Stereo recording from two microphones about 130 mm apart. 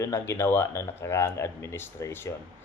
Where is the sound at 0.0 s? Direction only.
20° left (ahead or behind).